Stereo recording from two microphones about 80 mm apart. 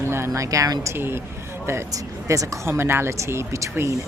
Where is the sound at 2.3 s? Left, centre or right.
Right.